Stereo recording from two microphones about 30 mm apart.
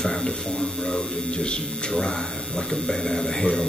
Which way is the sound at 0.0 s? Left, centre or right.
Centre.